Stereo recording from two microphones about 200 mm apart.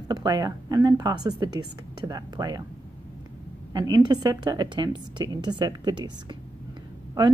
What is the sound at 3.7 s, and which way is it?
Speech, 20° right (ahead or behind).